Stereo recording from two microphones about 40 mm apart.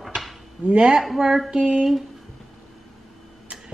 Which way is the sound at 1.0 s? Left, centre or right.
Centre.